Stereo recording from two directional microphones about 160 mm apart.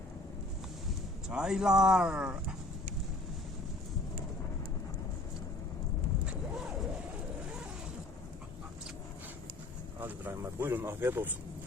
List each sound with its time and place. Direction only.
1.3 s speech: 5° right (ahead or behind)
10.0 s speech: 10° right (ahead or behind)